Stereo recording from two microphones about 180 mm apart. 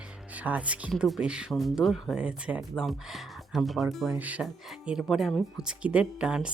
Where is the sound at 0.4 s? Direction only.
5° right (ahead or behind).